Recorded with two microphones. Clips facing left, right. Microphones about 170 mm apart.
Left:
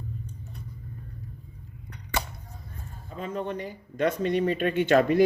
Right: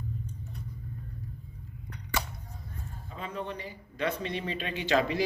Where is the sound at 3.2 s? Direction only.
45° left (ahead or behind).